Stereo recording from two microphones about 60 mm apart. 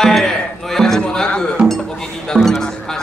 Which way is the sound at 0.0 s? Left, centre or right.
Centre.